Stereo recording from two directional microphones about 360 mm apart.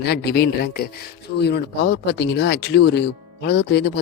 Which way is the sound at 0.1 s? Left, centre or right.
Left.